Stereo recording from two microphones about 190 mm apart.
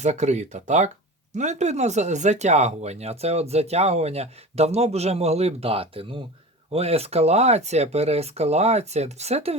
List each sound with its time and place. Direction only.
0.0 s speech: 35° right (ahead or behind)